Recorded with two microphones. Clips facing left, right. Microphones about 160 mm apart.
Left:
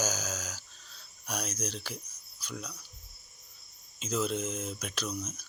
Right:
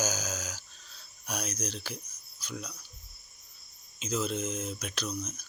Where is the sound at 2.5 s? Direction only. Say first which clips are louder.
Right 1 dB; 5° right (ahead or behind).